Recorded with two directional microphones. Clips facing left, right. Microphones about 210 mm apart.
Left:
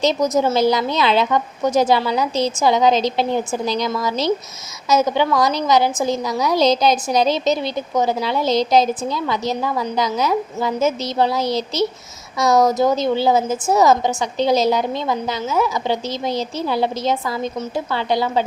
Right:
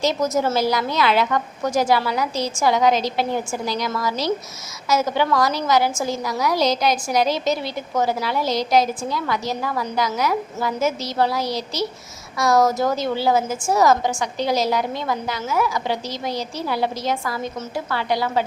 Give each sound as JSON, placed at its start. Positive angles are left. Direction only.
{"t": 0.0, "sound": "a woman's voice", "side_deg": 20}